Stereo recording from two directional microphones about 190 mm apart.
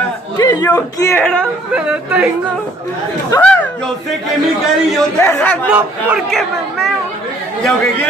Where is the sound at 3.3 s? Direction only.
10° left (ahead or behind).